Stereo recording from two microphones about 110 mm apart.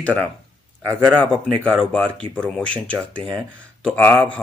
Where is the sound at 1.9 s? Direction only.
10° left (ahead or behind).